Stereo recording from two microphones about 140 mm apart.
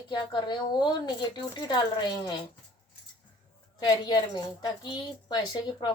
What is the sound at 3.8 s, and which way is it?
A woman's voice, 30° left (ahead or behind).